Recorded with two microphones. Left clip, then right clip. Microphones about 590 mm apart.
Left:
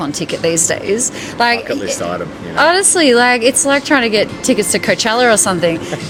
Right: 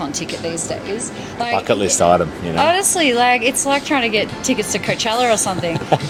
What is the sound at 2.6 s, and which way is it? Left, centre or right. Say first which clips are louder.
A woman's voice: left 4 dB; left.